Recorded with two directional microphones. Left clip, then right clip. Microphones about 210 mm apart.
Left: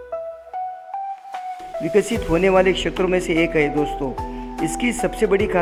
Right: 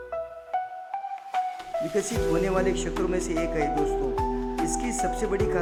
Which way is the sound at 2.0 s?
25° left (ahead or behind).